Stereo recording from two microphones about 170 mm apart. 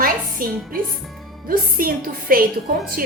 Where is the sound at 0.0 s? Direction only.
55° right (ahead or behind).